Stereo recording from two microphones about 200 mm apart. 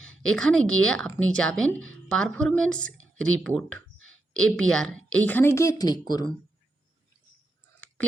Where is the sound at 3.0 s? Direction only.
90° right.